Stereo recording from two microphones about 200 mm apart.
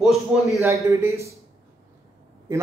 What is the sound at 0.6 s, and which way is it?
Speech, 15° right (ahead or behind).